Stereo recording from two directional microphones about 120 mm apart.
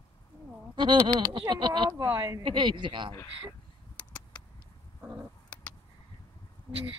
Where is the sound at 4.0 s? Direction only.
10° left (ahead or behind).